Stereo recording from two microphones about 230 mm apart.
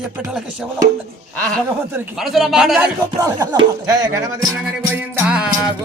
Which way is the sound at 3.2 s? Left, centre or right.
Centre.